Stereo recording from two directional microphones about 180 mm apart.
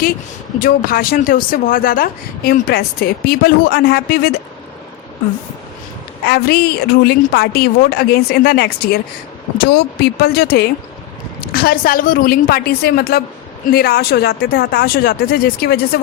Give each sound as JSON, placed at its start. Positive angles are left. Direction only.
{"t": 0.6, "sound": "speech", "side_deg": 55}
{"t": 6.2, "sound": "speech", "side_deg": 60}